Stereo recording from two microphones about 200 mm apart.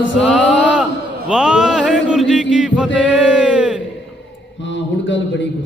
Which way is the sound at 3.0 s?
5° right (ahead or behind).